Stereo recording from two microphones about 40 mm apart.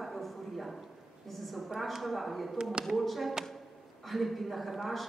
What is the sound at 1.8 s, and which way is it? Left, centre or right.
Speech, centre.